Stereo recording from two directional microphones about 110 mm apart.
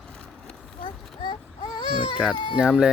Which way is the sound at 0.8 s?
50° left (ahead or behind).